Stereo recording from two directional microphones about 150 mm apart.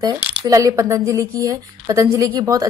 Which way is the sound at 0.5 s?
25° right (ahead or behind).